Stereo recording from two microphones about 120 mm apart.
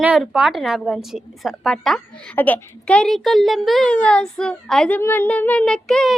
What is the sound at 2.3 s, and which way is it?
A child's voice, 15° left (ahead or behind).